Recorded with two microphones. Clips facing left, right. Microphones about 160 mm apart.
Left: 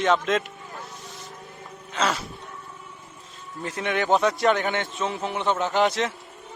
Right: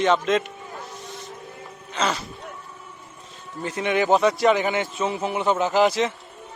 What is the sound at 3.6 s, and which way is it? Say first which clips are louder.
A man's voice: right 3 dB; centre (ahead or behind).